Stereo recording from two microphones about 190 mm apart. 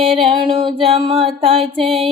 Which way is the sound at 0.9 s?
30° right (ahead or behind).